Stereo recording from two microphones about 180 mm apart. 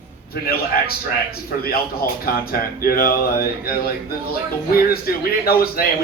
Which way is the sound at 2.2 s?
55° left (ahead or behind).